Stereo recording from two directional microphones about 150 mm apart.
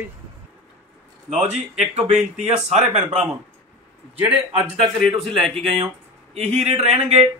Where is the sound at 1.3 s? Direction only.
50° right (ahead or behind).